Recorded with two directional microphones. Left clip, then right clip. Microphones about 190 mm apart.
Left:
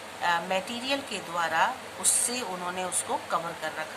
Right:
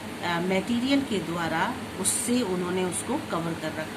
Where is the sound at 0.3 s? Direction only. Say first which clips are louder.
Even; 25° left (ahead or behind).